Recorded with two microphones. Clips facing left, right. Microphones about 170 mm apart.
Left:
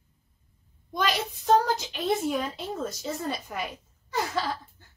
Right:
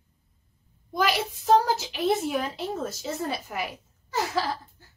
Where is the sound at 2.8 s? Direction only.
5° right (ahead or behind).